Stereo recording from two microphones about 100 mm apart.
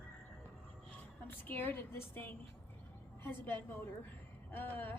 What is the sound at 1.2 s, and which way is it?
A woman's voice, 20° left (ahead or behind).